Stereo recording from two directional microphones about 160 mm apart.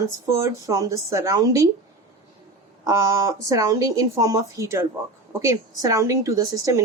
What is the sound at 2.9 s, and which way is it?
A woman's voice, 20° right (ahead or behind).